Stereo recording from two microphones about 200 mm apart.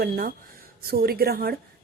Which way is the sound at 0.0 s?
50° right (ahead or behind).